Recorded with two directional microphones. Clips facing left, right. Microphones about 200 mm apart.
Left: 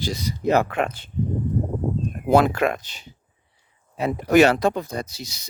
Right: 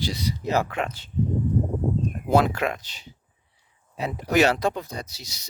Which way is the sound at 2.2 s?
55° left (ahead or behind).